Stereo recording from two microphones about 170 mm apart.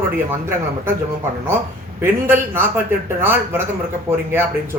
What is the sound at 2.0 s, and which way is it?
Speech, 15° right (ahead or behind).